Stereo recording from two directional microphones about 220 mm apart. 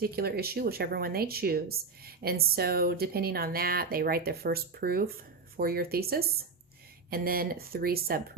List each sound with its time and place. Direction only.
0.0 s speech: 45° right (ahead or behind)